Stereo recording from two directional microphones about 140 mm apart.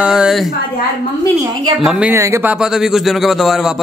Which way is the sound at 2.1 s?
20° right (ahead or behind).